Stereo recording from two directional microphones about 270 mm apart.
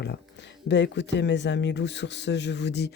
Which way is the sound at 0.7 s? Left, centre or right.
Left.